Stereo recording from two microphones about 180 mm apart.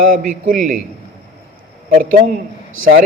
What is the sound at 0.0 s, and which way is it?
Speech, 50° right (ahead or behind).